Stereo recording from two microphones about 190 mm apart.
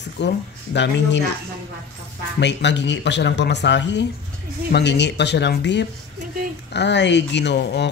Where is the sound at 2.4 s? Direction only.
65° left (ahead or behind).